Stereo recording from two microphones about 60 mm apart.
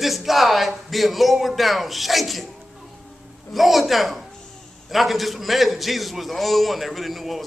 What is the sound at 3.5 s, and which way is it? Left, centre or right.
A man's voice, centre.